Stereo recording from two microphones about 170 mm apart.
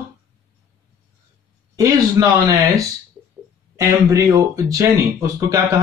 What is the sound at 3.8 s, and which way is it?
Speech, 15° right (ahead or behind).